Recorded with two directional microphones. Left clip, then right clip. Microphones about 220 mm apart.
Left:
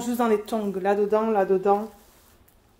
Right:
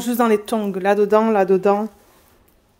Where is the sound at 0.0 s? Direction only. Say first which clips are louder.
Right 5 dB; 45° right (ahead or behind).